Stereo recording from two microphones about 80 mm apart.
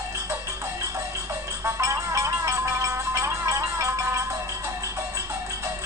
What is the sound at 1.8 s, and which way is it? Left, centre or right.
Music, right.